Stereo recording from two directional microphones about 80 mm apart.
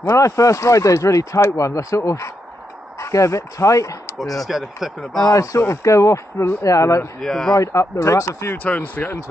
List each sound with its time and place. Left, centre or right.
0.1 s speech: left
4.5 s speech: centre
5.2 s speech: left
7.2 s speech: centre
7.5 s speech: left
8.6 s speech: left